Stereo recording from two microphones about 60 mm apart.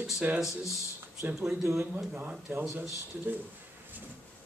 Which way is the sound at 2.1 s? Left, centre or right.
Right.